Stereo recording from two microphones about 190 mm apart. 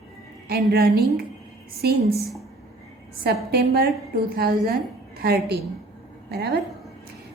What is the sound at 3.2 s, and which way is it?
A woman's voice, 55° right (ahead or behind).